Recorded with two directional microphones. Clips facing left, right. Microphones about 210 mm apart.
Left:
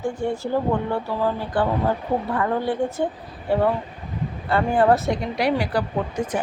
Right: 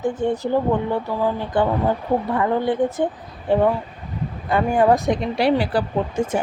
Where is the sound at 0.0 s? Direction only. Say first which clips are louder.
Right 3 dB; 20° right (ahead or behind).